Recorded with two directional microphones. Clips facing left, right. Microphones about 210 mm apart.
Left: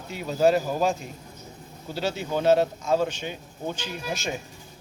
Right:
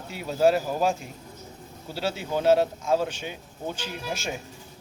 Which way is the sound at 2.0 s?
10° right (ahead or behind).